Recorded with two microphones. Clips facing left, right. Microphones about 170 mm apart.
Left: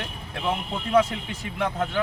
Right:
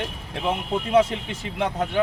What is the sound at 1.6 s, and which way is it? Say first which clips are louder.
Speech: right 3 dB; 20° right (ahead or behind).